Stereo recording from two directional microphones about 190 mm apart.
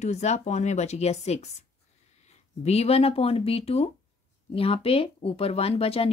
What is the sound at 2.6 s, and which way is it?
Speech, 35° left (ahead or behind).